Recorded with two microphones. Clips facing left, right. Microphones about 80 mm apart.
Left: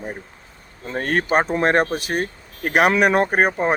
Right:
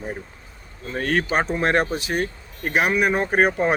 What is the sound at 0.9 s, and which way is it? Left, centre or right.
Speech, left.